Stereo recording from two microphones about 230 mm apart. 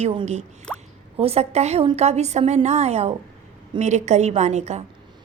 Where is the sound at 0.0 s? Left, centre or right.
Right.